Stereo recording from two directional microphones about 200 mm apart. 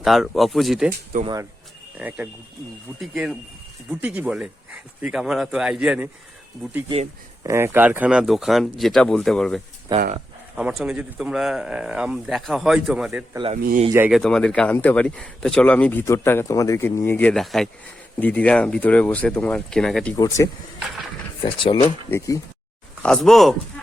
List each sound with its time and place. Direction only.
0.0 s speech: centre (ahead or behind)
1.2 s speech: 20° right (ahead or behind)
2.0 s speech: 5° right (ahead or behind)
6.8 s speech: 30° right (ahead or behind)
7.4 s speech: 15° right (ahead or behind)
9.9 s speech: 20° right (ahead or behind)
10.6 s speech: 5° right (ahead or behind)
13.3 s speech: 25° right (ahead or behind)
13.6 s speech: 50° right (ahead or behind)
13.9 s speech: 10° right (ahead or behind)
14.2 s speech: 5° left (ahead or behind)
20.1 s speech: 15° left (ahead or behind)
23.0 s speech: centre (ahead or behind)